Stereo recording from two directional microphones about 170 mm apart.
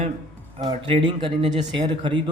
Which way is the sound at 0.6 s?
30° right (ahead or behind).